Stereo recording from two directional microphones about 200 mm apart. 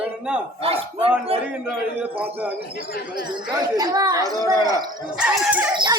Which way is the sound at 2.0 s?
10° right (ahead or behind).